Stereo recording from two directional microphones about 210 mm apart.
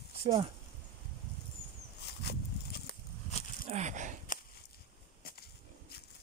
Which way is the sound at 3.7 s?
35° right (ahead or behind).